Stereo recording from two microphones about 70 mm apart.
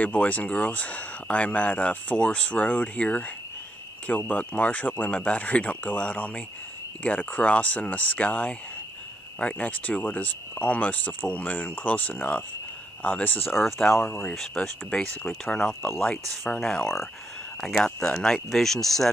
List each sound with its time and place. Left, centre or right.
0.0 s speech: centre
13.6 s speech: centre
16.8 s speech: centre